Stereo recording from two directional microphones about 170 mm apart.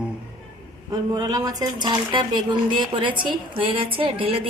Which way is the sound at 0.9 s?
25° right (ahead or behind).